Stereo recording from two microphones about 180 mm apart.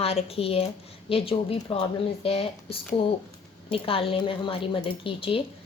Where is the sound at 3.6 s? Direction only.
30° left (ahead or behind).